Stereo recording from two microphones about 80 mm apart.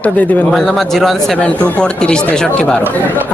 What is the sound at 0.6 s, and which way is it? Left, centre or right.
Speech, centre.